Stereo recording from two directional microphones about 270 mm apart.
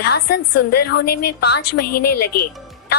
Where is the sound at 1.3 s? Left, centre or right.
Left.